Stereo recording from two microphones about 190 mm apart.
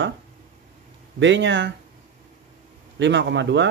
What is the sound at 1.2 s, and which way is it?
Speech, 70° right (ahead or behind).